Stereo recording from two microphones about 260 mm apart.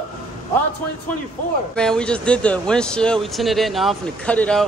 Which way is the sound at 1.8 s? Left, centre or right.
Centre.